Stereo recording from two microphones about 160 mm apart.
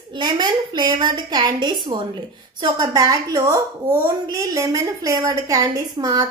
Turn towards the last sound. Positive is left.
turn(degrees=-20)  # may be behind; listen again after turning